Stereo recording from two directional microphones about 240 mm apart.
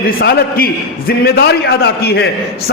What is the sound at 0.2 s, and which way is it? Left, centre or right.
A man's voice, left.